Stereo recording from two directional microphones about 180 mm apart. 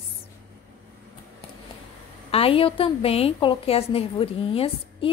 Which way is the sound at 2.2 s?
30° left (ahead or behind).